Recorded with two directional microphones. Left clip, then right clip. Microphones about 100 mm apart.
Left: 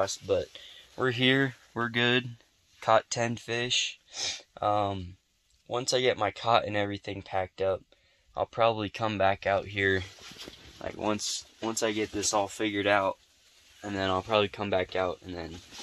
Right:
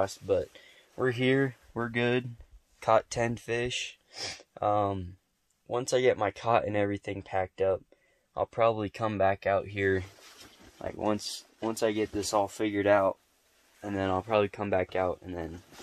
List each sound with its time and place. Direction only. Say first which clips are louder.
0.3 s speech: even; 20° right (ahead or behind)
1.0 s speech: left 1 dB; 5° right (ahead or behind)
2.8 s speech: left 1 dB; 30° right (ahead or behind)
4.2 s speech: left 1 dB; 50° right (ahead or behind)
5.7 s speech: right 1 dB; 60° right (ahead or behind)
6.9 s speech: right 2 dB; 70° right (ahead or behind)
7.2 s speech: even; 50° right (ahead or behind)
8.5 s speech: even; 20° right (ahead or behind)
11.0 s speech: even; 55° right (ahead or behind)
13.7 s speech: left 1 dB; 25° right (ahead or behind)
14.9 s speech: even; 40° right (ahead or behind)